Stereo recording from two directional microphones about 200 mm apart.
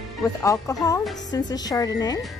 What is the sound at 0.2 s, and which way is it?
Speech, 15° left (ahead or behind).